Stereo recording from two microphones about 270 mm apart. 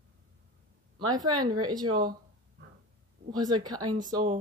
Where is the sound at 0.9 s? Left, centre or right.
Centre.